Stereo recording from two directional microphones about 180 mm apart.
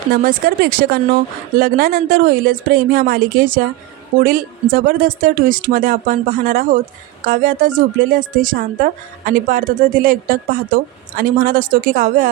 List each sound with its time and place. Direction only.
0.1 s speech: 55° right (ahead or behind)